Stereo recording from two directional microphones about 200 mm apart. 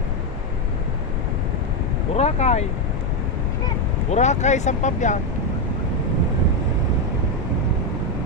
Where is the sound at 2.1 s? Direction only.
35° left (ahead or behind).